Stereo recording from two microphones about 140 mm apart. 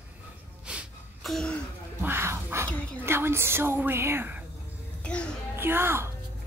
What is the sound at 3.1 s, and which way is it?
A woman's voice, 15° right (ahead or behind).